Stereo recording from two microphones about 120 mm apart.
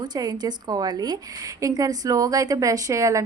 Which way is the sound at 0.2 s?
35° right (ahead or behind).